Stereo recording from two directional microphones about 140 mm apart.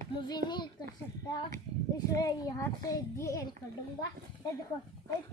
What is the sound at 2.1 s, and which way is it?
A child's voice, 25° left (ahead or behind).